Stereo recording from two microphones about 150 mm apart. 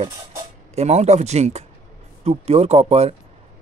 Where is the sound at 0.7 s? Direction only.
45° right (ahead or behind).